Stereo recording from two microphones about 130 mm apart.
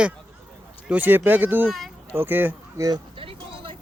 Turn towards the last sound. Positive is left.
turn(degrees=-45)  # may be behind; listen again after turning